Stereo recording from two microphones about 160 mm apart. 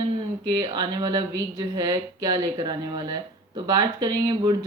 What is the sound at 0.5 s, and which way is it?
Speech, 25° right (ahead or behind).